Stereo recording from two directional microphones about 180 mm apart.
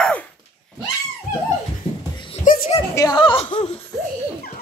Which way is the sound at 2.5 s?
50° left (ahead or behind).